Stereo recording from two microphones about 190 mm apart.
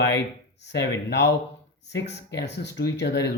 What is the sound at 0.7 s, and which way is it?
Speech, 65° left (ahead or behind).